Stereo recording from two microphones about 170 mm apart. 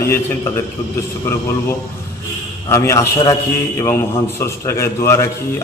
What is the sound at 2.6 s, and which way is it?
A man's voice, 15° left (ahead or behind).